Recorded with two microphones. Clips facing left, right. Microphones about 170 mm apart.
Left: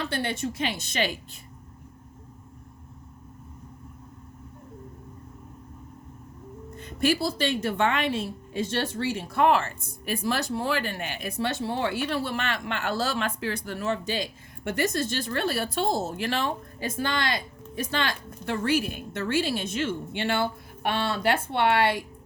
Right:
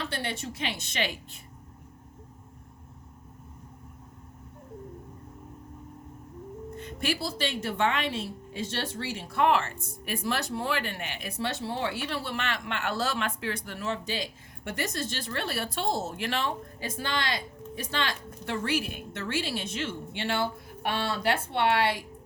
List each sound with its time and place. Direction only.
0.1 s a woman's voice: 50° left (ahead or behind)
6.7 s a woman's voice: 40° left (ahead or behind); by 22.0 s 55° left (ahead or behind)